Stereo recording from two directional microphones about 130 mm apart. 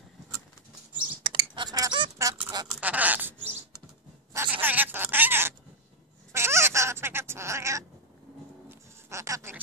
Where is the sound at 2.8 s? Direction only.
10° right (ahead or behind).